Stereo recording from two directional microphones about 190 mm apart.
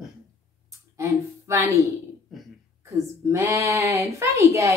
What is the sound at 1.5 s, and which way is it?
Speech, 15° right (ahead or behind).